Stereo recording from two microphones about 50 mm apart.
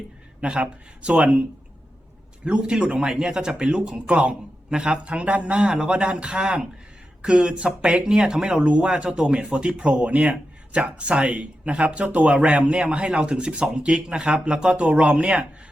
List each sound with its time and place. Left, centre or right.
0.4 s speech: right